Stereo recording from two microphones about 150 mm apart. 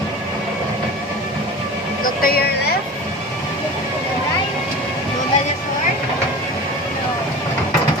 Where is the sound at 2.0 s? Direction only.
75° left (ahead or behind).